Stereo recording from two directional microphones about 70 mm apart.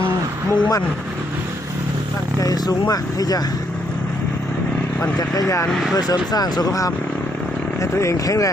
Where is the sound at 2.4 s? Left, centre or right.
Left.